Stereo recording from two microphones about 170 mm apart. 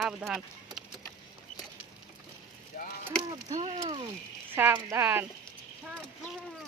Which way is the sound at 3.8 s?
30° right (ahead or behind).